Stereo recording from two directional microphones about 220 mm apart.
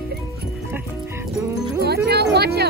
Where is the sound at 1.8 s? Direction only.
45° right (ahead or behind).